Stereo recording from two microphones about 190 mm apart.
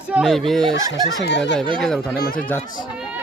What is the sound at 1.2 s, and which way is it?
Speech, 65° left (ahead or behind).